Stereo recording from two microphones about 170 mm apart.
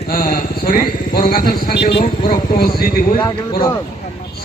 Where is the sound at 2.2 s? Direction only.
60° left (ahead or behind).